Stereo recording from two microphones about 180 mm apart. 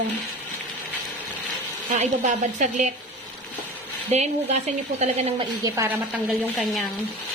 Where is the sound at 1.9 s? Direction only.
45° right (ahead or behind).